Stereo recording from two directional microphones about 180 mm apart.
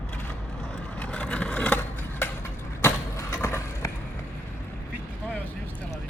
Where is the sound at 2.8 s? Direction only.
15° left (ahead or behind).